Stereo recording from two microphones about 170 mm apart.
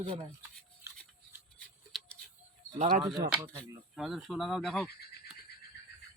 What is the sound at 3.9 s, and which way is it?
Speech, centre (ahead or behind).